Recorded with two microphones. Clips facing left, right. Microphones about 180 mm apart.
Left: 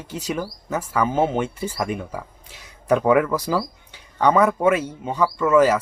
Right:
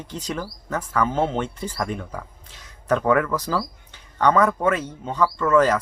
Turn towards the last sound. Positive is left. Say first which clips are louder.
# left 2 dB
turn(degrees=10)  # may be behind; listen again after turning